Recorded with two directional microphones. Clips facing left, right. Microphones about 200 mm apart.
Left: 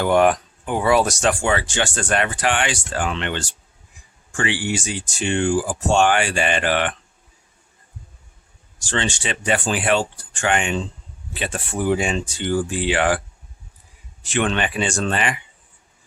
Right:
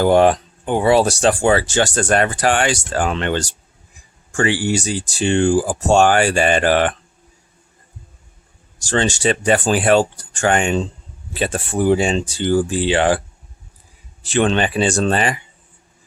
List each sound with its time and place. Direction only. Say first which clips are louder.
0.0 s speech: right 4 dB; 30° right (ahead or behind)
8.8 s speech: right 7 dB; 40° right (ahead or behind)